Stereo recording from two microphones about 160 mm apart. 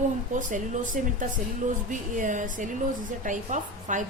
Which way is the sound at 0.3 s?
55° right (ahead or behind).